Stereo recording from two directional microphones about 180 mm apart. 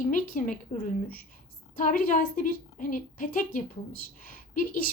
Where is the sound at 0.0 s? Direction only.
45° left (ahead or behind).